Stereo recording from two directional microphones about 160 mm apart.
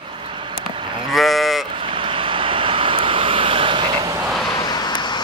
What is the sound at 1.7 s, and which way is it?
Vehicle, 35° right (ahead or behind).